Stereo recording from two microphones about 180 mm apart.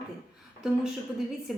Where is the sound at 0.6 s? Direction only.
Centre (ahead or behind).